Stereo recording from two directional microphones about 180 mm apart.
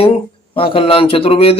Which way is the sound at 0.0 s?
30° left (ahead or behind).